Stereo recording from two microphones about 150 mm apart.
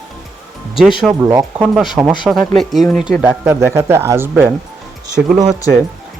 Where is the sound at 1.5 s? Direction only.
5° right (ahead or behind).